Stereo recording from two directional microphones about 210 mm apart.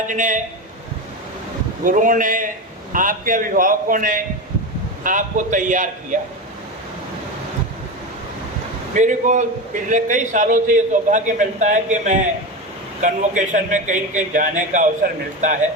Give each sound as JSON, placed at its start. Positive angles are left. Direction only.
{"t": 0.1, "sound": "a man's voice", "side_deg": -35}
{"t": 1.8, "sound": "a man's voice", "side_deg": -40}
{"t": 9.0, "sound": "a man's voice", "side_deg": -35}